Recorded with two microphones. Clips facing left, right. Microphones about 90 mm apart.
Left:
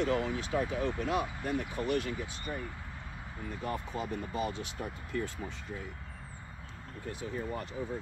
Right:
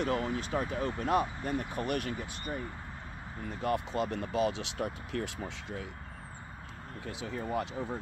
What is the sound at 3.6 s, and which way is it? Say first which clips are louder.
Speech: right 6 dB; 75° right (ahead or behind).